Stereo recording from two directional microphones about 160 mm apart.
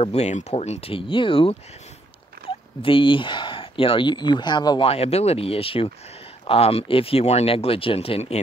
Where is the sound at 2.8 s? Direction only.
30° left (ahead or behind).